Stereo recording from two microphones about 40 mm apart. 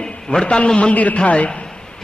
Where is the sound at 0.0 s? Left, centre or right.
Centre.